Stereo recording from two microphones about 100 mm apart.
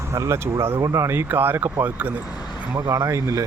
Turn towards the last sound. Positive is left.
turn(degrees=-30)  # may be behind; listen again after turning